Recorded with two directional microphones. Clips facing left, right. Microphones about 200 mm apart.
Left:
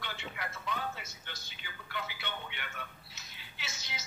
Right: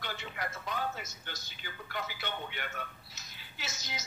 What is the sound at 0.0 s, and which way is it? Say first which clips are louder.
Television: right 2 dB; 40° right (ahead or behind).